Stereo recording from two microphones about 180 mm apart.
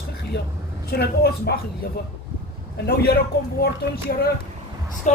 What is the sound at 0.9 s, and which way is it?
Speech, 60° left (ahead or behind).